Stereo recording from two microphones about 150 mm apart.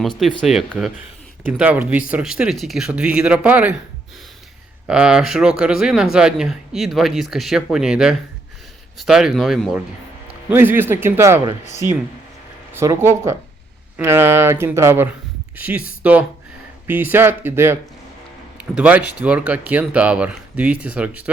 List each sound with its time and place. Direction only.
0.2 s speech: centre (ahead or behind)
4.9 s speech: 5° right (ahead or behind)
10.5 s speech: 15° right (ahead or behind)
12.7 s speech: 20° right (ahead or behind)